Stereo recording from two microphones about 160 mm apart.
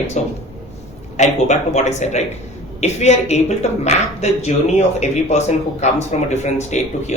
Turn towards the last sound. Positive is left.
turn(degrees=45)  # may be behind; listen again after turning